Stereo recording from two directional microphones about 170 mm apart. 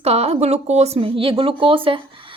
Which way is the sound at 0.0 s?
35° right (ahead or behind).